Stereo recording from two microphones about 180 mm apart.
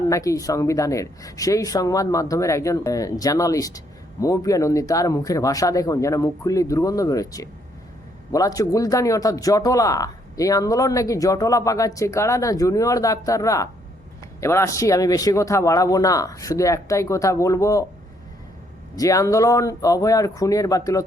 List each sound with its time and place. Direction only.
0.1 s a man's voice: 20° left (ahead or behind)
18.9 s a man's voice: 20° left (ahead or behind)